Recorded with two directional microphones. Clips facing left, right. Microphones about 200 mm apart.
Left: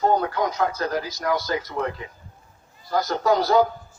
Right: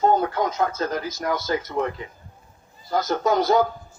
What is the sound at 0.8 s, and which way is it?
Speech, 20° right (ahead or behind).